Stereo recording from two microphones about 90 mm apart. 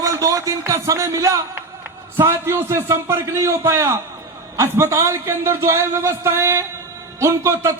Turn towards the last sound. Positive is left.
turn(degrees=-35)  # may be behind; listen again after turning